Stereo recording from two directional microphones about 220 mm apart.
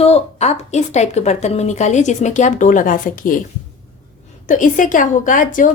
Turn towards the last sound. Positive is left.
turn(degrees=35)  # may be behind; listen again after turning